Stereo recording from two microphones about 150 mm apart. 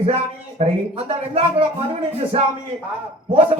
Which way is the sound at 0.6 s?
40° right (ahead or behind).